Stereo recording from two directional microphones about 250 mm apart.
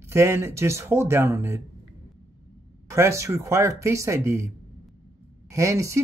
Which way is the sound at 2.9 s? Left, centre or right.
Centre.